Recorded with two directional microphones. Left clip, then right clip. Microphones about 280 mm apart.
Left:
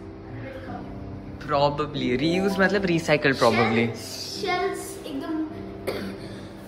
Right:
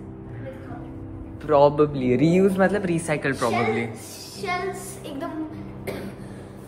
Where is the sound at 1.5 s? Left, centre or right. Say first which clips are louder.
Right 6 dB; centre.